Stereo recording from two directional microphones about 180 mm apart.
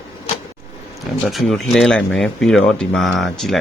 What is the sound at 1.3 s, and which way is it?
Speech, centre (ahead or behind).